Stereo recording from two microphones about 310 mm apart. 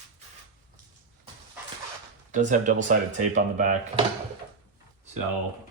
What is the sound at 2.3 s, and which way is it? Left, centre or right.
Speech, right.